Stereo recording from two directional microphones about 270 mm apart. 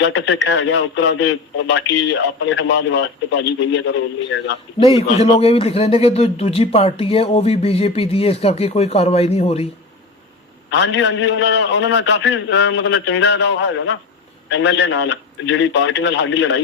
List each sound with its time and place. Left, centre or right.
0.0 s a man's voice: left
4.8 s a man's voice: left
10.7 s a man's voice: left